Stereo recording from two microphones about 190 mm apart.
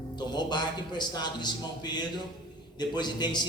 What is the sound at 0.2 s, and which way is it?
A man's voice, 25° left (ahead or behind).